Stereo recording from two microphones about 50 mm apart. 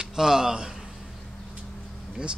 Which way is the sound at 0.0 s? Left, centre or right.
Centre.